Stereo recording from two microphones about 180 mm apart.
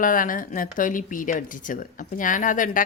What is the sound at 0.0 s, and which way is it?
Speech, 50° left (ahead or behind).